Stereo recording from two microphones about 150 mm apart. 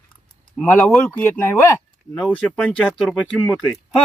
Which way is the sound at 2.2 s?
5° left (ahead or behind).